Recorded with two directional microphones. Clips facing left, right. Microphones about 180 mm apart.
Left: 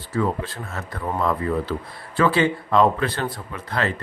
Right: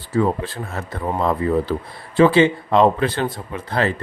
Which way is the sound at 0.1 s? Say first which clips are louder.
Right 4 dB; 30° right (ahead or behind).